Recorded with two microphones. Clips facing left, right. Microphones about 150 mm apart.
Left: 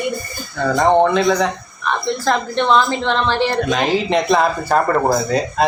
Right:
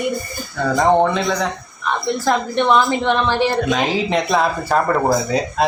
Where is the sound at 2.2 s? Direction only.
15° right (ahead or behind).